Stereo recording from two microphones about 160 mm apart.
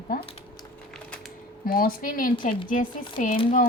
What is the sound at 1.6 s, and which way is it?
Speech, 65° left (ahead or behind).